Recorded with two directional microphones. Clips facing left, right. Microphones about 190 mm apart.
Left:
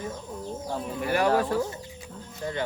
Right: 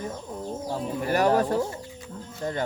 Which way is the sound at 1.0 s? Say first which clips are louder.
Right 2 dB; 40° right (ahead or behind).